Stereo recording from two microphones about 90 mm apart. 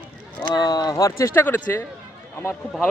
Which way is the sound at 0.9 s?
35° left (ahead or behind).